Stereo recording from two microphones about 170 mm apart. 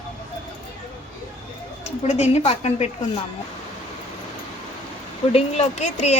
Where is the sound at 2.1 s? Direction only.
40° left (ahead or behind).